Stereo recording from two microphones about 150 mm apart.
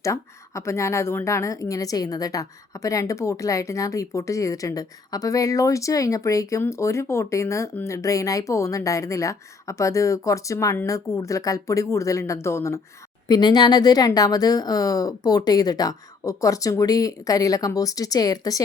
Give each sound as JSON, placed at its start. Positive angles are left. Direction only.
{"t": 0.0, "sound": "speech", "side_deg": 20}
{"t": 13.2, "sound": "speech", "side_deg": 30}